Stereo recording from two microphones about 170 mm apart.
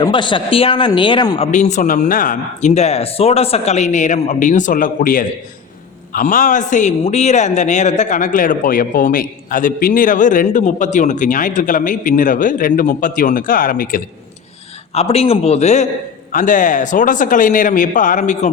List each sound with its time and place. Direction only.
0.0 s a man's voice: 30° left (ahead or behind)
1.4 s a man's voice: 45° left (ahead or behind)
14.9 s a man's voice: 35° left (ahead or behind)